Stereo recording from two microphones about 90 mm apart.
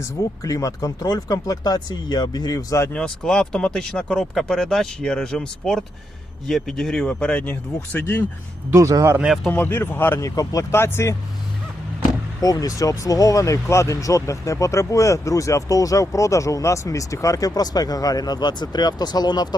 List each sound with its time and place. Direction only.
0.0 s speech: 40° left (ahead or behind)
2.9 s speech: 5° left (ahead or behind); by 8.2 s 25° left (ahead or behind)
8.7 s speech: 35° right (ahead or behind)
9.2 s speech: centre (ahead or behind)
9.5 s speech: 20° left (ahead or behind)
10.2 s speech: 40° left (ahead or behind)
12.4 s speech: 40° left (ahead or behind)